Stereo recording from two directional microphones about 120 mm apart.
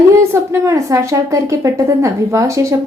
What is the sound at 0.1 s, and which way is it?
A woman's voice, 25° right (ahead or behind).